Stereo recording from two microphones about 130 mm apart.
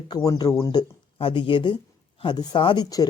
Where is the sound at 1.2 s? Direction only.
40° left (ahead or behind).